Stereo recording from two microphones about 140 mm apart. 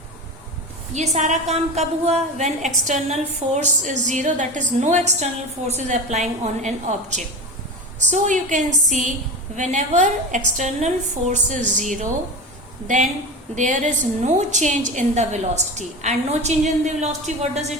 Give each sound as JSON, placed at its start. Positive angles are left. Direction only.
{"t": 0.9, "sound": "a woman's voice", "side_deg": -55}
{"t": 13.6, "sound": "a woman's voice", "side_deg": -60}